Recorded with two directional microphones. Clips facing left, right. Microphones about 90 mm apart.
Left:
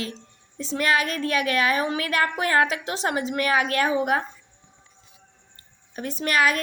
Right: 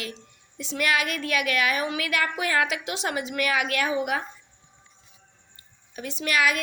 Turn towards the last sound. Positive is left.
turn(degrees=40)  # may be behind; listen again after turning